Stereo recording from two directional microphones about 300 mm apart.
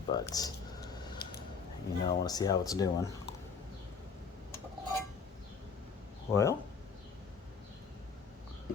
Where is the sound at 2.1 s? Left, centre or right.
Centre.